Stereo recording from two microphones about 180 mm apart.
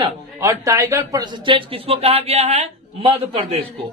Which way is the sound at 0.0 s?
15° right (ahead or behind).